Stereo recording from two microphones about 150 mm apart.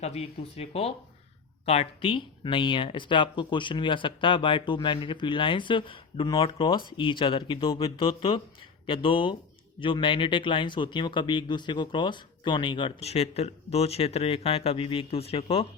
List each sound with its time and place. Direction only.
0.0 s speech: 45° left (ahead or behind)